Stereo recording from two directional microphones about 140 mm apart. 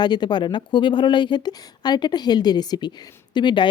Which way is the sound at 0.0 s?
30° left (ahead or behind).